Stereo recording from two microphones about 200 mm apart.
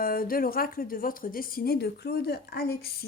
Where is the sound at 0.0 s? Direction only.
45° left (ahead or behind).